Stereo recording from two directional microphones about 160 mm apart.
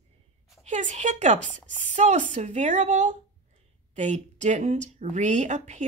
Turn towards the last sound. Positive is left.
turn(degrees=-45)  # may be behind; listen again after turning